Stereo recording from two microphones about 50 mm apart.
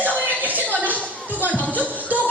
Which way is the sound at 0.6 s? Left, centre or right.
Left.